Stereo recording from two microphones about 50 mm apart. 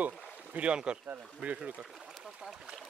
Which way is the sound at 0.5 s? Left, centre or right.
Right.